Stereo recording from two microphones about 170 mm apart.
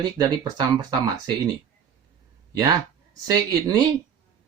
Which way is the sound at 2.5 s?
20° right (ahead or behind).